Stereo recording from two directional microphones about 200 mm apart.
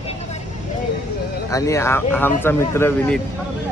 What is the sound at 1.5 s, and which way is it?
Speech, 15° left (ahead or behind).